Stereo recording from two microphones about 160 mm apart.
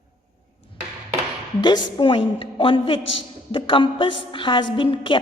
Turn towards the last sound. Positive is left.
turn(degrees=30)  # may be behind; listen again after turning